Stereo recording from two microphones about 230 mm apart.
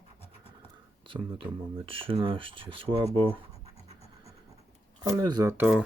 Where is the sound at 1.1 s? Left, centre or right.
Right.